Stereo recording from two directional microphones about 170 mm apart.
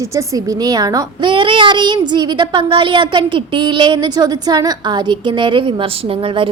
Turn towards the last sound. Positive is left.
turn(degrees=-30)  # may be behind; listen again after turning